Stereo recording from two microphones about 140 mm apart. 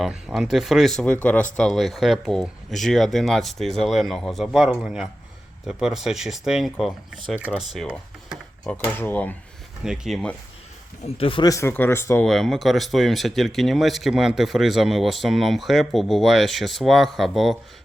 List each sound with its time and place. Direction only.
0.0 s speech: centre (ahead or behind)
7.5 s speech: centre (ahead or behind)
9.8 s speech: 5° right (ahead or behind)
11.0 s speech: 40° left (ahead or behind)
11.4 s speech: 20° left (ahead or behind)
12.2 s speech: 5° left (ahead or behind)